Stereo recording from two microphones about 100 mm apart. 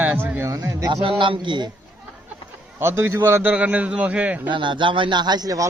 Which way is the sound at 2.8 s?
25° right (ahead or behind).